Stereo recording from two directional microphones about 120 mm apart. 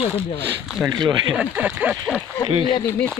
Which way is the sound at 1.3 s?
10° right (ahead or behind).